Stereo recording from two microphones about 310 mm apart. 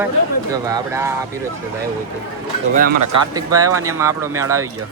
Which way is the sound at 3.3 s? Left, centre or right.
Centre.